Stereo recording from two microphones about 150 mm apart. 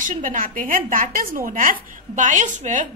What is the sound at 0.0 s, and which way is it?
A woman's voice, 60° right (ahead or behind).